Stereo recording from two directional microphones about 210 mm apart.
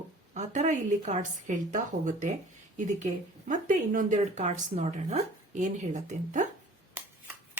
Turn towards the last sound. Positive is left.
turn(degrees=-5)  # may be behind; listen again after turning